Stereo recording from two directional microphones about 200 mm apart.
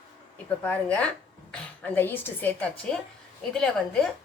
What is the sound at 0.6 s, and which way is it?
A woman's voice, 5° left (ahead or behind).